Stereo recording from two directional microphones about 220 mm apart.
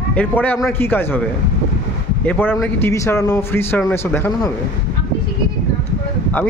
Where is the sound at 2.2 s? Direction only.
10° left (ahead or behind).